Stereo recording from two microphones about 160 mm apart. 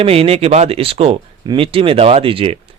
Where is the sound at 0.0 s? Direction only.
40° right (ahead or behind).